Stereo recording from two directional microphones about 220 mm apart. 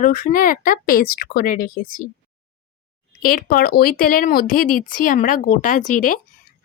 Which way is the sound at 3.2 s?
40° left (ahead or behind).